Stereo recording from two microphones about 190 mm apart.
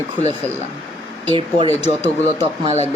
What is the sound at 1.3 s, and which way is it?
Speech, 25° right (ahead or behind).